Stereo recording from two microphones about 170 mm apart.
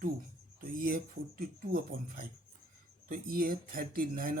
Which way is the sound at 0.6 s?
60° right (ahead or behind).